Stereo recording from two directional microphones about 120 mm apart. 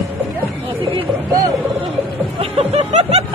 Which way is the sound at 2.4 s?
55° right (ahead or behind).